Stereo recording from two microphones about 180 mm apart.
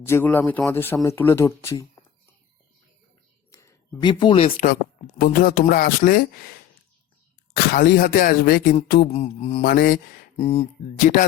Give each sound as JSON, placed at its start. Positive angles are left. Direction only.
{"t": 0.0, "sound": "a man's voice", "side_deg": 10}
{"t": 3.5, "sound": "a sound", "side_deg": 15}
{"t": 4.1, "sound": "speech", "side_deg": 30}
{"t": 5.2, "sound": "a man's voice", "side_deg": 50}
{"t": 9.6, "sound": "speech", "side_deg": 55}
{"t": 10.3, "sound": "speech", "side_deg": 35}